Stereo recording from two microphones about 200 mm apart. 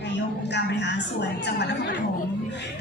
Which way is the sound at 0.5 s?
60° left (ahead or behind).